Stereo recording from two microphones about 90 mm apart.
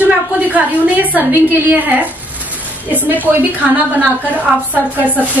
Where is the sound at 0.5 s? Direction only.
20° right (ahead or behind).